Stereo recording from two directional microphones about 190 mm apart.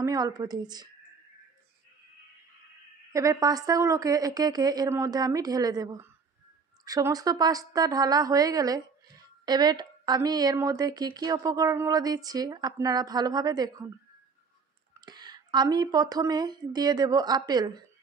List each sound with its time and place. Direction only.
0.0 s a woman's voice: 20° right (ahead or behind)
3.1 s a woman's voice: 15° right (ahead or behind)
15.0 s a woman's voice: 20° right (ahead or behind)